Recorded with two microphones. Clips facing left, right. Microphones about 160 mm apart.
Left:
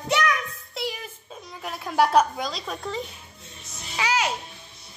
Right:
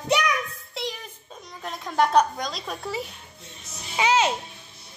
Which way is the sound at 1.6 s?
5° left (ahead or behind).